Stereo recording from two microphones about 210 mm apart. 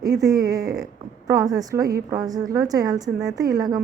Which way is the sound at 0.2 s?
15° right (ahead or behind).